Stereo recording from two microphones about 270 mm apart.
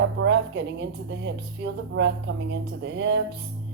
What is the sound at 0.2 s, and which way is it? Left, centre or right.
Speech, right.